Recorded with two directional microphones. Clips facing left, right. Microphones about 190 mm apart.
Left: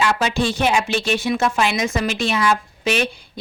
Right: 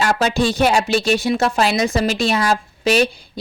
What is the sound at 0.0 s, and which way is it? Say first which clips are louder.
Speech: right 2 dB; 40° right (ahead or behind).